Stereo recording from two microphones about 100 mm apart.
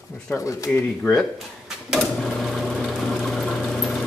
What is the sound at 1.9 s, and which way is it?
Sewing machine, 5° left (ahead or behind).